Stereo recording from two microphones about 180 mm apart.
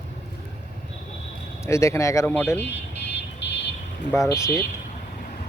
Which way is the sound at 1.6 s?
15° left (ahead or behind).